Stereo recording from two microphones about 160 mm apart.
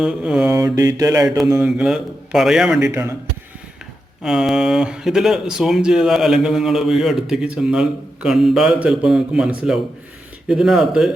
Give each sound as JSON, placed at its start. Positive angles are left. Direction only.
{"t": 0.0, "sound": "speech", "side_deg": -5}
{"t": 0.5, "sound": "mantra", "side_deg": -20}
{"t": 1.5, "sound": "speech", "side_deg": -5}
{"t": 4.2, "sound": "speech", "side_deg": -5}